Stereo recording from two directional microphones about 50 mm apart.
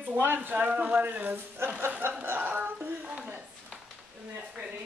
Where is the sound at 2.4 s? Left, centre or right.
Right.